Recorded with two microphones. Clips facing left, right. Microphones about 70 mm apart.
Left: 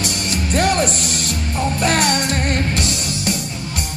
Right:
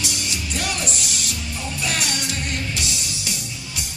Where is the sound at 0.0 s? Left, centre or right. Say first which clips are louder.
Left 6 dB; left.